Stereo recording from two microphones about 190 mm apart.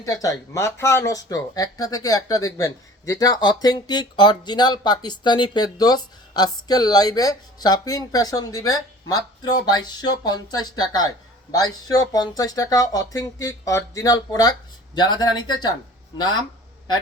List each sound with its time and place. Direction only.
0.0 s speech: 20° left (ahead or behind)